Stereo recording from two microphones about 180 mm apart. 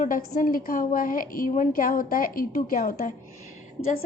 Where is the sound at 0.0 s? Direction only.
50° left (ahead or behind).